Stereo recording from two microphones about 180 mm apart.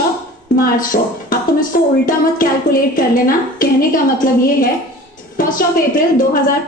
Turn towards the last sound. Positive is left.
turn(degrees=50)  # may be behind; listen again after turning